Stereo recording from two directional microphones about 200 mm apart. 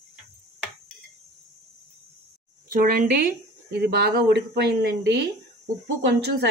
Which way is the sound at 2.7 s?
45° right (ahead or behind).